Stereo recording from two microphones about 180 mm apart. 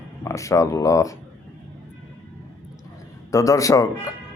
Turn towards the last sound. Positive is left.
turn(degrees=20)  # may be behind; listen again after turning